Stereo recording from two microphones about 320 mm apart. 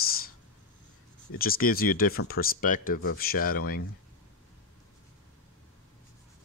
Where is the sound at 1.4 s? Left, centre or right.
Left.